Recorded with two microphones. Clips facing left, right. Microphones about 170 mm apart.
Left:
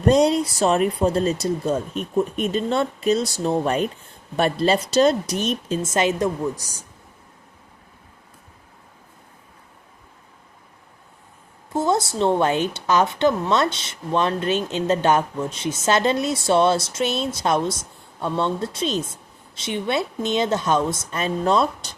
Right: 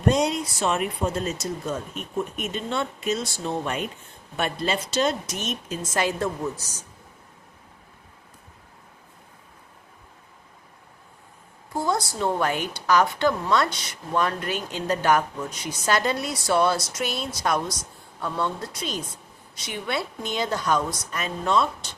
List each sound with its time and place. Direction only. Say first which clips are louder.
0.1 s a woman's voice: left 6 dB; 35° left (ahead or behind); by 6.8 s 10° left (ahead or behind)
11.7 s a woman's voice: left 5 dB; 25° left (ahead or behind)